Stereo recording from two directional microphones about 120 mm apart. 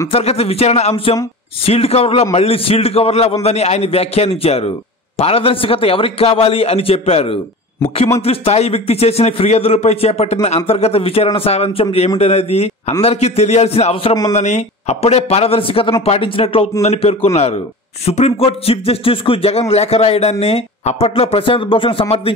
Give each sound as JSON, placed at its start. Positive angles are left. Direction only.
{"t": 0.1, "sound": "a man's voice", "side_deg": 55}
{"t": 14.3, "sound": "speech", "side_deg": 75}